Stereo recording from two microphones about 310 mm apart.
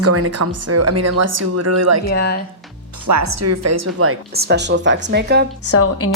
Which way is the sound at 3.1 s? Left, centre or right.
Right.